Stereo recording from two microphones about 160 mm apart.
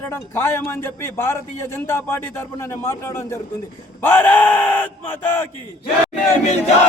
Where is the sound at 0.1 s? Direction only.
15° left (ahead or behind).